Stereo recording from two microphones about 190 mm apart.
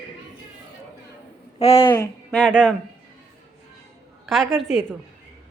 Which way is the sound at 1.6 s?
30° left (ahead or behind).